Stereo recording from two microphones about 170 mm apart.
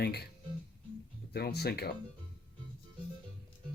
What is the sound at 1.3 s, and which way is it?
Speech, 70° left (ahead or behind).